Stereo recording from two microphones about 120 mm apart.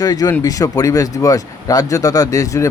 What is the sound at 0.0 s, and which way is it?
Speech, 30° left (ahead or behind).